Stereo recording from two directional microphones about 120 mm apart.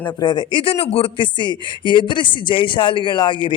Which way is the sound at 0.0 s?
35° left (ahead or behind).